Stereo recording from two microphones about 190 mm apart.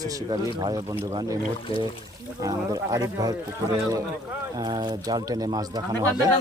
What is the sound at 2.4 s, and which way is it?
Speech, 20° right (ahead or behind).